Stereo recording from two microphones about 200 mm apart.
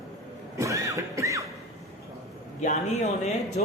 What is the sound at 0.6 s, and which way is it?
Music, 15° right (ahead or behind).